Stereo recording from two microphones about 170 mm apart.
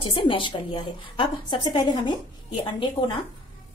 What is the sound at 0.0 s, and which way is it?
A woman's voice, 30° left (ahead or behind).